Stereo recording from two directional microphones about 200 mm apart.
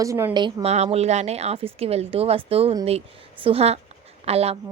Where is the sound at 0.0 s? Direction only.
15° right (ahead or behind).